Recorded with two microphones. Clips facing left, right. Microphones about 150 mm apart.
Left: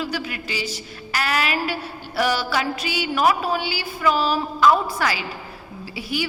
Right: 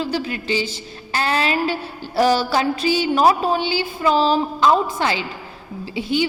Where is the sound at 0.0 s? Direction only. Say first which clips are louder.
Right 4 dB; 30° right (ahead or behind).